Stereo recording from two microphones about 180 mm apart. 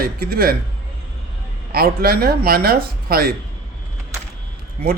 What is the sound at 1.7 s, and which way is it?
Speech, 60° right (ahead or behind).